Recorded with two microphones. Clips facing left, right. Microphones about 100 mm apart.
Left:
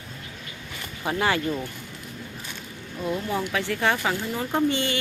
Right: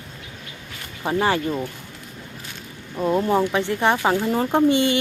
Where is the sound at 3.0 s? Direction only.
45° right (ahead or behind).